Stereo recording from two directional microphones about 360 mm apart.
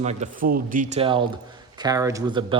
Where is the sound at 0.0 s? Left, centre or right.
Centre.